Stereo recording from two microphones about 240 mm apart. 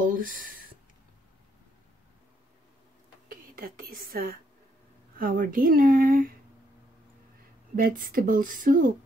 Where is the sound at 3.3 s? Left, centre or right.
Right.